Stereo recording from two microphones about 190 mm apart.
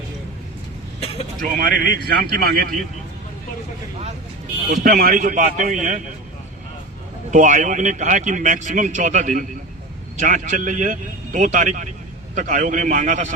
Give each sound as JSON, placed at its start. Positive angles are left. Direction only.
{"t": 1.4, "sound": "a man's voice", "side_deg": -50}
{"t": 4.9, "sound": "a man's voice", "side_deg": -45}
{"t": 7.3, "sound": "a man's voice", "side_deg": -40}